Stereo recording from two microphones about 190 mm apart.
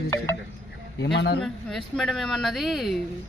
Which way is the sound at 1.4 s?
5° left (ahead or behind).